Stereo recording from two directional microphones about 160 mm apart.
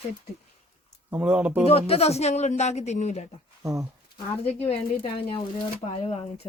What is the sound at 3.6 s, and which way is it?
Speech, 20° right (ahead or behind).